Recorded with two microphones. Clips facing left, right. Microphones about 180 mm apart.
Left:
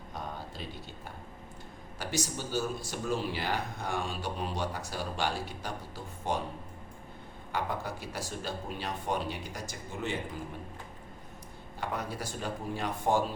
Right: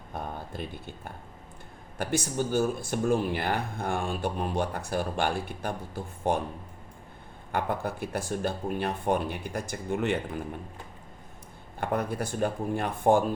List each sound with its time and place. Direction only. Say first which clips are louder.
0.1 s a sound: right 4 dB; 55° right (ahead or behind)
2.0 s speech: right 6 dB; 55° right (ahead or behind)
7.5 s speech: right 5 dB; 55° right (ahead or behind)
11.8 s speech: right 7 dB; 55° right (ahead or behind)